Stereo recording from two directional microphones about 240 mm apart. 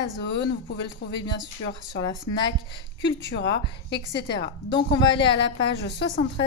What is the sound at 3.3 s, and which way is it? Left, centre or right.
Speech, left.